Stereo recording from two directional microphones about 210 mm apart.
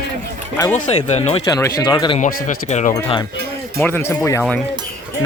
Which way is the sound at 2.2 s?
35° left (ahead or behind).